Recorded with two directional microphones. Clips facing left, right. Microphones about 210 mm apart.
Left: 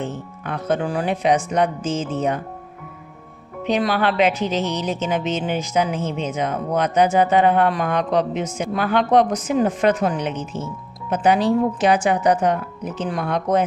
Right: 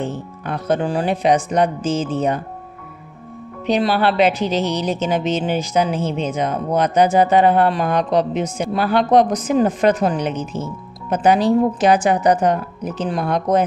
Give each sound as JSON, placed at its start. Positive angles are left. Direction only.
{"t": 0.0, "sound": "speech", "side_deg": -35}
{"t": 3.6, "sound": "speech", "side_deg": -35}